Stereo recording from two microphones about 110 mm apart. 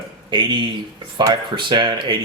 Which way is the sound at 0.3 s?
45° right (ahead or behind).